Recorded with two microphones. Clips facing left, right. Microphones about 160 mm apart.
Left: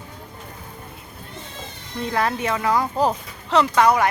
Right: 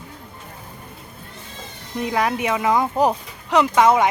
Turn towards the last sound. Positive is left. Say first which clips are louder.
# right 2 dB
turn(degrees=-20)  # may be behind; listen again after turning